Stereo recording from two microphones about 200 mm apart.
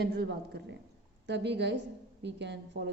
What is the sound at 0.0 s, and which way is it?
A woman's voice, 55° right (ahead or behind).